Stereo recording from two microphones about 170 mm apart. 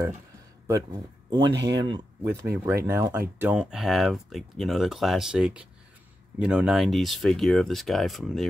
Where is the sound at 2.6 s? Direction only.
15° right (ahead or behind).